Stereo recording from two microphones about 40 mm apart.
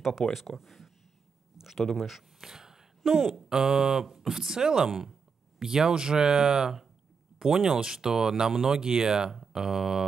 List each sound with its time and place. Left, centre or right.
0.3 s speech: centre